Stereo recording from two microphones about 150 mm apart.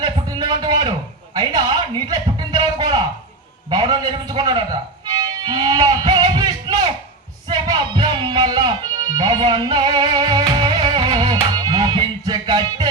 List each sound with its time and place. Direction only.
0.0 s a sound: 30° right (ahead or behind)
3.7 s a man's voice: 25° right (ahead or behind)
5.0 s music: 25° right (ahead or behind)